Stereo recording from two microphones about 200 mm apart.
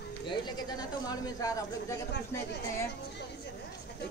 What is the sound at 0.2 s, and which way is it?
Speech, 20° left (ahead or behind).